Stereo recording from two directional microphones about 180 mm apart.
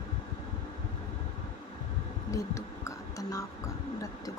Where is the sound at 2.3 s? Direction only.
15° left (ahead or behind).